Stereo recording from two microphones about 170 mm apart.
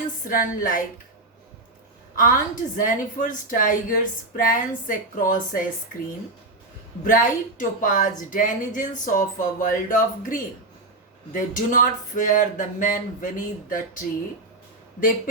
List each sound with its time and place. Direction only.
0.3 s a woman's voice: 55° left (ahead or behind)
2.1 s a woman's voice: 50° left (ahead or behind)
7.0 s a woman's voice: 50° left (ahead or behind)